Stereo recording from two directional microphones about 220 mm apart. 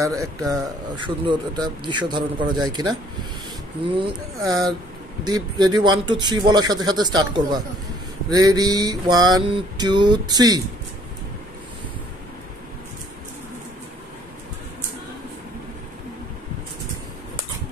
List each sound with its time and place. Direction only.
0.0 s speech: 15° right (ahead or behind)
3.9 s mantra: 20° right (ahead or behind)
5.2 s speech: 20° right (ahead or behind)
8.3 s mantra: 15° right (ahead or behind)